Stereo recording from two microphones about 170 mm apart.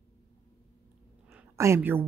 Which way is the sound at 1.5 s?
15° right (ahead or behind).